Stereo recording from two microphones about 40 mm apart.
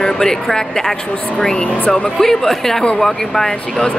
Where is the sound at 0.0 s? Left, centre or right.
Centre.